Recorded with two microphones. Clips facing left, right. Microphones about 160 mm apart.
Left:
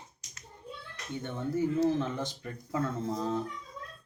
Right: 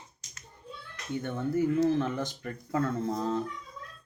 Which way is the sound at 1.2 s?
20° left (ahead or behind).